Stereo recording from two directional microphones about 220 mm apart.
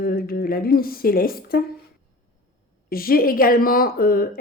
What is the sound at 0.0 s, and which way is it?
Speech, 45° left (ahead or behind).